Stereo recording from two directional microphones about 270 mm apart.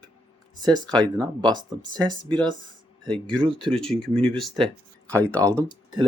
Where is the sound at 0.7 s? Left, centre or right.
Centre.